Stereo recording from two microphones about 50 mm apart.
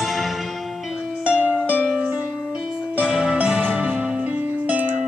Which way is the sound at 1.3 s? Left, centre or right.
Right.